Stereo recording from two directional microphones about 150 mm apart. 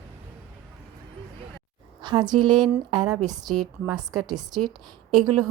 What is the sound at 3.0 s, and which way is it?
Speech, 5° right (ahead or behind).